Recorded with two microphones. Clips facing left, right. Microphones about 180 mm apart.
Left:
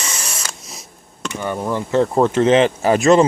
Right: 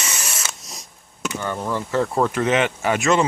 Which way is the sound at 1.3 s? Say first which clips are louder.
Left 4 dB; 15° left (ahead or behind).